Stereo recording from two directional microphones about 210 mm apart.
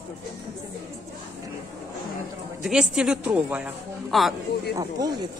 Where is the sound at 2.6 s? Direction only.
Centre (ahead or behind).